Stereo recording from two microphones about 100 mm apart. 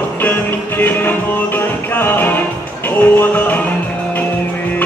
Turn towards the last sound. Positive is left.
turn(degrees=20)  # may be behind; listen again after turning